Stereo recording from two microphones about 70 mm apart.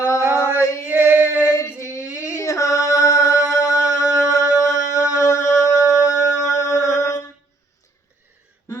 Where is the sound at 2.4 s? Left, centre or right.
Left.